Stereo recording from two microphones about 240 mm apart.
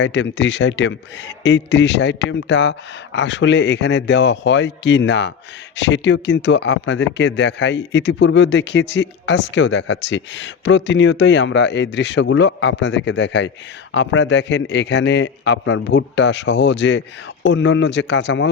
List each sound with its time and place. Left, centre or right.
0.0 s speech: left